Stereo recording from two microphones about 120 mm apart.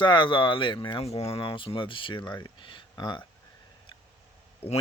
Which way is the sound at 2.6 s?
45° left (ahead or behind).